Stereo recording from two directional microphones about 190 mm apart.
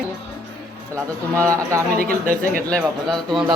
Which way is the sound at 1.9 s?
50° right (ahead or behind).